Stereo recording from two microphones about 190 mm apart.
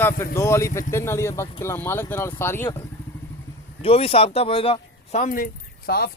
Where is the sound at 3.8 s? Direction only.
30° left (ahead or behind).